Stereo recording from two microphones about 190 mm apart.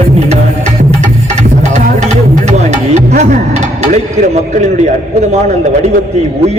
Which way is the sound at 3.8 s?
40° right (ahead or behind).